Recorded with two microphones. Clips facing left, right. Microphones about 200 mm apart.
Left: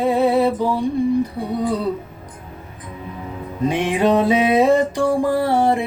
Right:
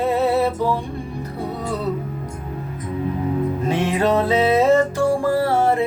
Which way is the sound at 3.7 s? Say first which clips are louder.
Left 3 dB; 15° left (ahead or behind).